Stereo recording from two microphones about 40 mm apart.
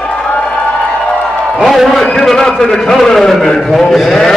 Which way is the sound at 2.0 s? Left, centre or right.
Centre.